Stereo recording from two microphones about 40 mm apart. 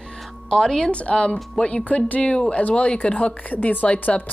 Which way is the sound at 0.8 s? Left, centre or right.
Left.